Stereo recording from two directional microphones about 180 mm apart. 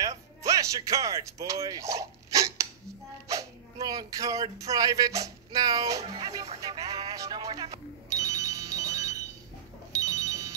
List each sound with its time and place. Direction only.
0.0 s speech: 20° right (ahead or behind)
6.0 s speech: 35° right (ahead or behind)
6.6 s ringtone: 20° right (ahead or behind)
9.9 s telephone bell ringing: 15° right (ahead or behind)